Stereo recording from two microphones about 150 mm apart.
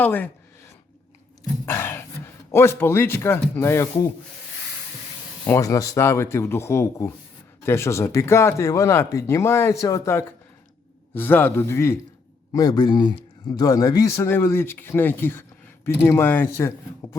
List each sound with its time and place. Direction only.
0.0 s speech: 10° left (ahead or behind)
1.6 s speech: 15° left (ahead or behind)
5.5 s speech: 20° left (ahead or behind)
12.5 s speech: 25° left (ahead or behind)